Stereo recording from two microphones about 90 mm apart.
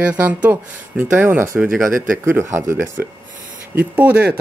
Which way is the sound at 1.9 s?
30° right (ahead or behind).